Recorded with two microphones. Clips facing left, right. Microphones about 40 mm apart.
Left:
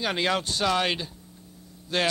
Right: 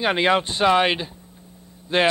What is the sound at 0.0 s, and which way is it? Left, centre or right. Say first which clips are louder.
Speech: right 7 dB; right.